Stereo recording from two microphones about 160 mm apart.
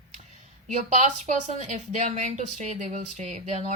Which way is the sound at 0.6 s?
50° right (ahead or behind).